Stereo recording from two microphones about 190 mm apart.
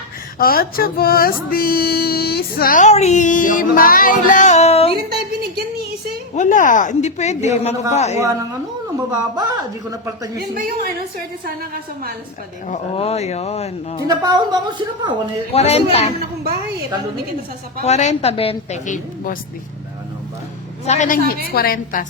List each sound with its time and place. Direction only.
0.3 s a sound: 50° left (ahead or behind); by 4.9 s 35° left (ahead or behind)
5.0 s a sound: 55° right (ahead or behind)
6.3 s speech: 40° left (ahead or behind)
9.0 s speech: 20° right (ahead or behind)
11.2 s a woman's voice: 50° right (ahead or behind)
12.6 s speech: 35° left (ahead or behind)
14.2 s speech: 20° right (ahead or behind)
15.5 s speech: 35° left (ahead or behind)
17.8 s speech: 35° left (ahead or behind)
20.8 s speech: 35° left (ahead or behind)
21.5 s a sound: 50° left (ahead or behind)